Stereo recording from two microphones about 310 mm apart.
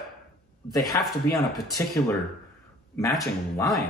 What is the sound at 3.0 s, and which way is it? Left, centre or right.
Speech, centre.